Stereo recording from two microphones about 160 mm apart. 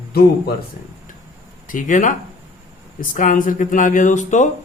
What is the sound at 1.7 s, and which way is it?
Speech, 55° left (ahead or behind).